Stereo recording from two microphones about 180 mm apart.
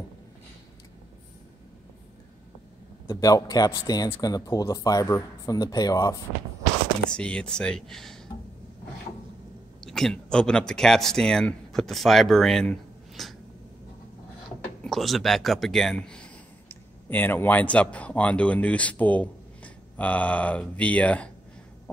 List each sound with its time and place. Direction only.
3.1 s speech: 20° left (ahead or behind)
7.1 s speech: 5° left (ahead or behind)
9.8 s speech: 5° left (ahead or behind)
14.8 s speech: centre (ahead or behind)